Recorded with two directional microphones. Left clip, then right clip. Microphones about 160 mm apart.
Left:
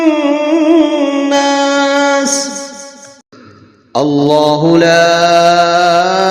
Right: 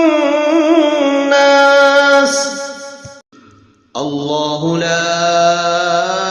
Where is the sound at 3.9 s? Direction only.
35° left (ahead or behind).